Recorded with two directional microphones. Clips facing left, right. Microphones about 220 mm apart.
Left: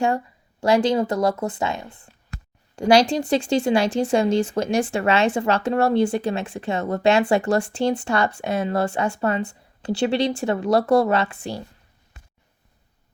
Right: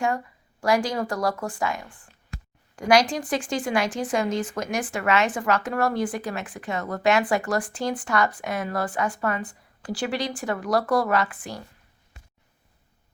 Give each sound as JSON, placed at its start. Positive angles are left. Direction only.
{"t": 0.6, "sound": "a woman's voice", "side_deg": 25}